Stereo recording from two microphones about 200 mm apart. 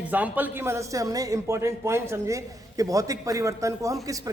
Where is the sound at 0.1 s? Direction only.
10° right (ahead or behind).